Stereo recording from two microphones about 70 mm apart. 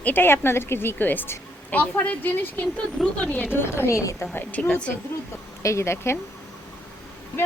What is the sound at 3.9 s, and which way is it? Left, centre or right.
Speech, left.